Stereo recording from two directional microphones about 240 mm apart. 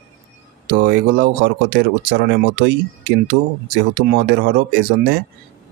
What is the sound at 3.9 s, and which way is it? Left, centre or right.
Speech, right.